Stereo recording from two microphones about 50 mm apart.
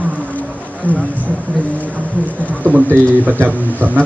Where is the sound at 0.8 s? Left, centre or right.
Left.